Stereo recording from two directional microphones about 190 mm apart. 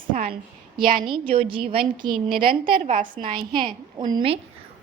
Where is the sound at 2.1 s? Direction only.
50° right (ahead or behind).